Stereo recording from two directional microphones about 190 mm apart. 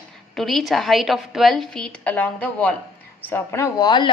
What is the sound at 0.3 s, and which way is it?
A woman's voice, centre (ahead or behind).